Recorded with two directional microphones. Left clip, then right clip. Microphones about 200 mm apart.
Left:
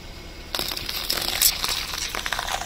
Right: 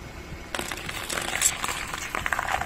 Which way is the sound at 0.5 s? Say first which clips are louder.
Left 4 dB; 10° right (ahead or behind).